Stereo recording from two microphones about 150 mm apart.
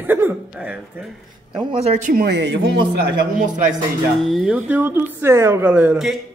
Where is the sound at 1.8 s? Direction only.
55° right (ahead or behind); by 2.7 s 90° right.